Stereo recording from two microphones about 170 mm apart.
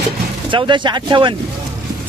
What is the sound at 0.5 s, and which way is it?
Speech, 30° right (ahead or behind).